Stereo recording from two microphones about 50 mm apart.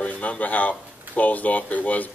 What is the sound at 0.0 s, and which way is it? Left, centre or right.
Speech, left.